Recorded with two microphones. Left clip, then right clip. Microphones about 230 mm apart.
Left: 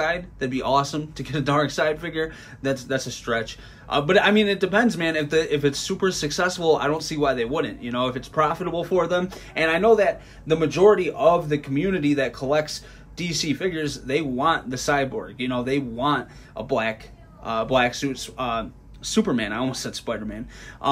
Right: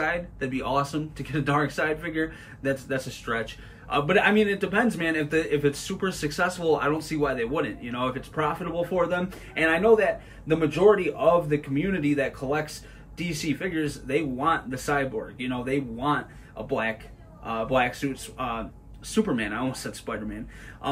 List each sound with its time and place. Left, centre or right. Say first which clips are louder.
0.0 s speech: left 3 dB; centre